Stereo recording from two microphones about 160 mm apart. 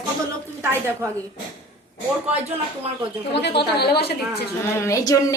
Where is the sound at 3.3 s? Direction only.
90° left.